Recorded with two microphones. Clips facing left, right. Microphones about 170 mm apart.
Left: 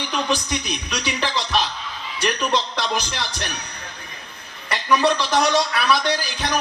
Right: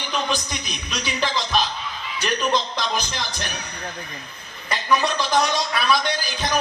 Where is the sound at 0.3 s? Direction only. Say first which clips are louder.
Left 4 dB; 70° left (ahead or behind).